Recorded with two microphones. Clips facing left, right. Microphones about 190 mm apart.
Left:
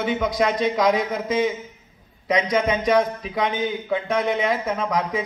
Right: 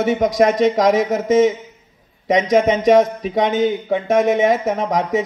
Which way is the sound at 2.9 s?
45° right (ahead or behind).